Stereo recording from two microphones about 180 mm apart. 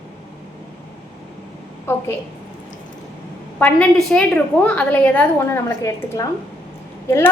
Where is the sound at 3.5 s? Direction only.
5° left (ahead or behind).